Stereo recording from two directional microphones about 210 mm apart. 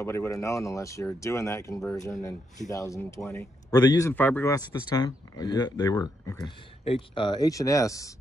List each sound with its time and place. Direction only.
0.0 s speech: 15° left (ahead or behind)